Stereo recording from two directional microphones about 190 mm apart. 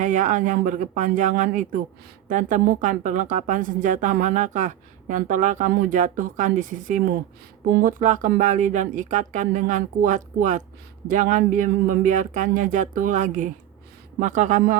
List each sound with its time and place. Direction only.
0.0 s a woman's voice: 40° right (ahead or behind)